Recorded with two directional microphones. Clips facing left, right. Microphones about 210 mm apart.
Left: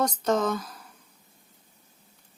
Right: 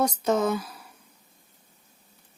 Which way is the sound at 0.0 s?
10° right (ahead or behind).